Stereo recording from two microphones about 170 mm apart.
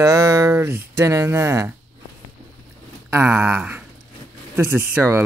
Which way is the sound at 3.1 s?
15° right (ahead or behind).